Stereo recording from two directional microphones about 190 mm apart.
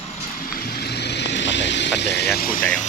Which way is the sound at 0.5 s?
55° left (ahead or behind).